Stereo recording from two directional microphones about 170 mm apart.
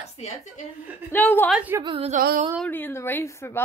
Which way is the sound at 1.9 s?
40° right (ahead or behind).